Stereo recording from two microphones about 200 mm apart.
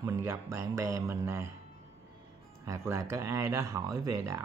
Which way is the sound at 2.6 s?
15° right (ahead or behind).